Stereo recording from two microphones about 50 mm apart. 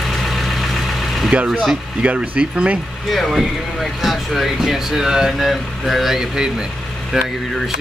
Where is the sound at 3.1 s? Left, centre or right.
Centre.